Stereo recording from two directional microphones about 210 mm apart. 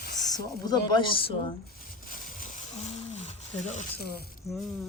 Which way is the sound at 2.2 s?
40° left (ahead or behind).